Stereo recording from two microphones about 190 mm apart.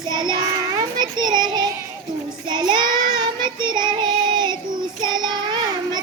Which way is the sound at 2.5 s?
25° right (ahead or behind).